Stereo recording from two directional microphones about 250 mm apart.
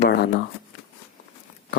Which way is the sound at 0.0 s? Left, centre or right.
Left.